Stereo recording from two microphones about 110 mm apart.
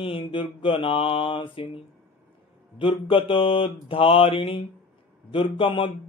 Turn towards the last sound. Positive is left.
turn(degrees=50)  # may be behind; listen again after turning